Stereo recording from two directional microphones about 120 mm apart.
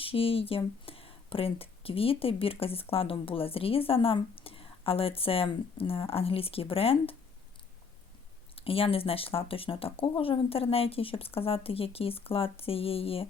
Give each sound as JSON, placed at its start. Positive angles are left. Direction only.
{"t": 0.0, "sound": "speech", "side_deg": 50}
{"t": 8.5, "sound": "speech", "side_deg": 50}